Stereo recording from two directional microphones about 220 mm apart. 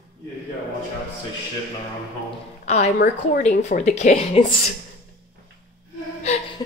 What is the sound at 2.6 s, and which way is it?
A woman's voice, 30° left (ahead or behind).